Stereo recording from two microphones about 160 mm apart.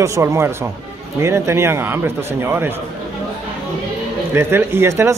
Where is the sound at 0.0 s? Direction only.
20° right (ahead or behind).